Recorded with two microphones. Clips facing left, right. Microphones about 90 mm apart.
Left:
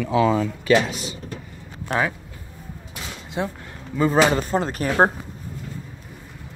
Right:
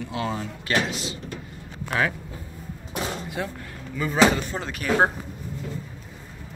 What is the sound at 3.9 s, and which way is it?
Speech, 35° left (ahead or behind).